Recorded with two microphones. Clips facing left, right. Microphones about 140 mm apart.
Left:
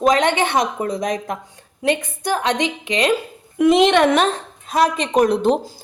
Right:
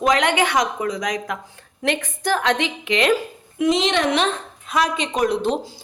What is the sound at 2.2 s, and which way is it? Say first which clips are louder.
Speech: left 1 dB; 20° left (ahead or behind).